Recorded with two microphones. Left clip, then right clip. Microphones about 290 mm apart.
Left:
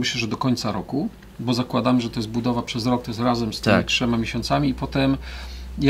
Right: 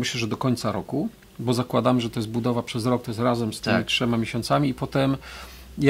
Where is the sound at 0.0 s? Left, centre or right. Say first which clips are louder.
Left 2 dB; right.